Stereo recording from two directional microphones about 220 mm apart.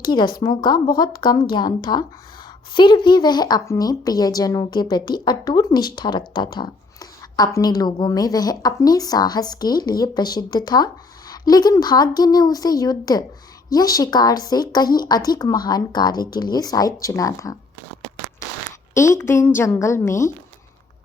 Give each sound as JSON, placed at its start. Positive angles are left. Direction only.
{"t": 0.0, "sound": "speech", "side_deg": 20}
{"t": 18.9, "sound": "speech", "side_deg": 10}